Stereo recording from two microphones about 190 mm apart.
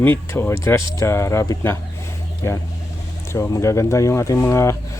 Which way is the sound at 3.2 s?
15° left (ahead or behind).